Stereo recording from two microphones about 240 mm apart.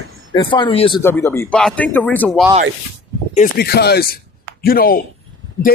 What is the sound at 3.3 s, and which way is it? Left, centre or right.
Speech, left.